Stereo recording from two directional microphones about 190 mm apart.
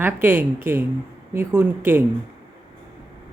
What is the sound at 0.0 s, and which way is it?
Speech, 10° right (ahead or behind).